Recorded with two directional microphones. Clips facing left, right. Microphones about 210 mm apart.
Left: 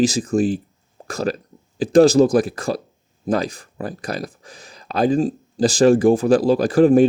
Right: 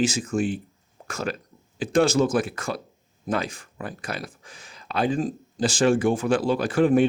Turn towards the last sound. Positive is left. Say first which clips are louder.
# left 6 dB
turn(degrees=40)  # may be behind; listen again after turning